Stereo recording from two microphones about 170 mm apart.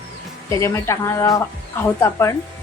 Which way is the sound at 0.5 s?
15° left (ahead or behind).